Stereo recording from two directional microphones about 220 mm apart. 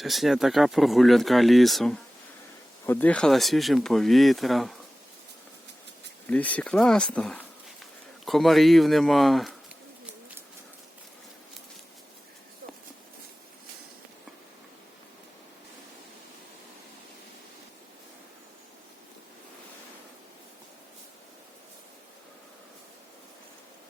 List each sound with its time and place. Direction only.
0.0 s speech: centre (ahead or behind)
6.2 s speech: 5° left (ahead or behind)